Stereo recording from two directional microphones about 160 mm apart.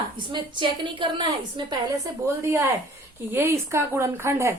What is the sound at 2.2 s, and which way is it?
A woman's voice, 15° right (ahead or behind).